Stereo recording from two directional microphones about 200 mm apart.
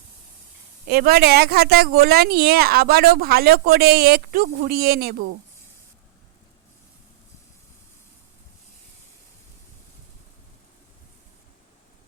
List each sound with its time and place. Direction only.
0.9 s speech: 50° right (ahead or behind)